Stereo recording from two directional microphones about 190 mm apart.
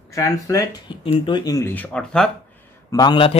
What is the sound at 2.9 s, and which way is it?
Speech, 25° left (ahead or behind).